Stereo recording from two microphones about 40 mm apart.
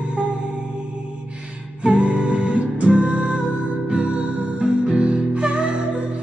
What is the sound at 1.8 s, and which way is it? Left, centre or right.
Music, right.